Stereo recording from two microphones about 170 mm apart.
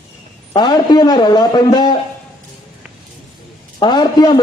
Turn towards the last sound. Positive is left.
turn(degrees=25)  # may be behind; listen again after turning